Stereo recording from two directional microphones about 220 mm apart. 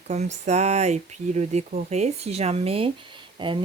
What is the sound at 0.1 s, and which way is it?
Speech, 30° right (ahead or behind).